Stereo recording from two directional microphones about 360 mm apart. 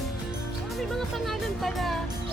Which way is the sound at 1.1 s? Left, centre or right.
Centre.